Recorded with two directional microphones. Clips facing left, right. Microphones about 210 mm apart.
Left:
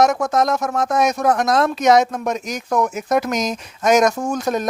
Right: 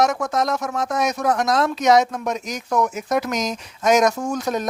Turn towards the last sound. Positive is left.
turn(degrees=50)  # may be behind; listen again after turning